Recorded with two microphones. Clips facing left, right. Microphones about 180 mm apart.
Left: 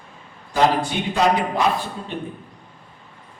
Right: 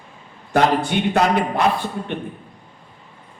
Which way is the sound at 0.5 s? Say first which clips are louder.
Right 1 dB; 65° right (ahead or behind).